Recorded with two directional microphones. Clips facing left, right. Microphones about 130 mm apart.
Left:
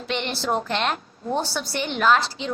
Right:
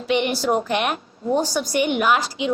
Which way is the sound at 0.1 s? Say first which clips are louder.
Right 5 dB; 15° right (ahead or behind).